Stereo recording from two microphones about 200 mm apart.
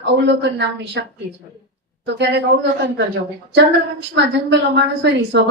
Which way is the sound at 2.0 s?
60° right (ahead or behind).